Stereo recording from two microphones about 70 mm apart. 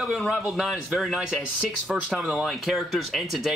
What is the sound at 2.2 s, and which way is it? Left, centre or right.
Speech, centre.